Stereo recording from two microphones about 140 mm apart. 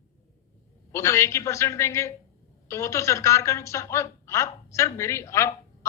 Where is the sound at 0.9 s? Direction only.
20° left (ahead or behind).